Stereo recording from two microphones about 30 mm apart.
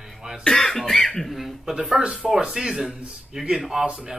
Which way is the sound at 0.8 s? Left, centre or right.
Centre.